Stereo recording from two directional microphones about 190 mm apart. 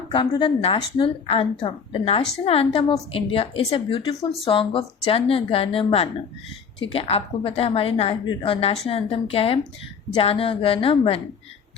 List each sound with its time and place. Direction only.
0.1 s a woman's voice: 25° left (ahead or behind)